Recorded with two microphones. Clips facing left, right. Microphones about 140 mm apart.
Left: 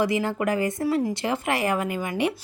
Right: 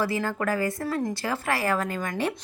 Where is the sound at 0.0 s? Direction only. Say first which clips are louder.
Left 3 dB; 20° left (ahead or behind).